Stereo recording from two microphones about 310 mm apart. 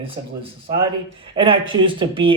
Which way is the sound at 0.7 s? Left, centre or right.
Centre.